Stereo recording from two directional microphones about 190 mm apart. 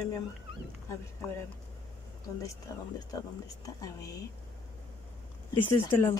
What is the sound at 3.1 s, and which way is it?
Speech, 20° left (ahead or behind).